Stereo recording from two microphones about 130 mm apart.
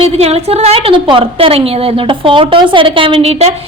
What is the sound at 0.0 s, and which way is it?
A woman's voice, 50° right (ahead or behind).